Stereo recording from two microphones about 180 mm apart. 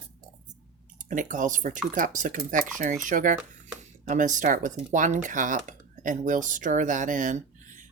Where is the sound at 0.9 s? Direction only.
45° right (ahead or behind).